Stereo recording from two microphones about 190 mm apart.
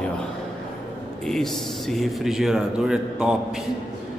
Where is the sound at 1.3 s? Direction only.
Centre (ahead or behind).